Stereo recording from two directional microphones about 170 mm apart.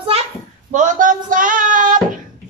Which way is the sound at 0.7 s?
50° right (ahead or behind).